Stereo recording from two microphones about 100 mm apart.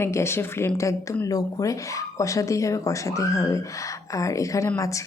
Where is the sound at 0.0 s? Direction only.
25° left (ahead or behind).